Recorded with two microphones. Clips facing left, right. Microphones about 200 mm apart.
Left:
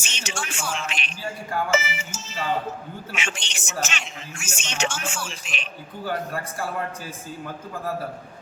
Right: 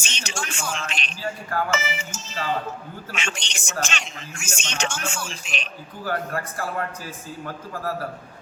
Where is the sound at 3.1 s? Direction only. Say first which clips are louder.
Right 1 dB; 5° left (ahead or behind).